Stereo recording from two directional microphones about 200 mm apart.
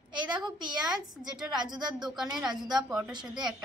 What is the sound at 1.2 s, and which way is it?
Speech, centre (ahead or behind).